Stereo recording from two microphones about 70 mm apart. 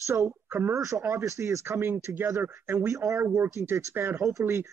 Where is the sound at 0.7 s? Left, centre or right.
Right.